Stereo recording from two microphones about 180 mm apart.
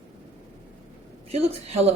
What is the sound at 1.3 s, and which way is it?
Speech, 35° right (ahead or behind).